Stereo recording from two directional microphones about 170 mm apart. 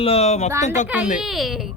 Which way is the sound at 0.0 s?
35° left (ahead or behind).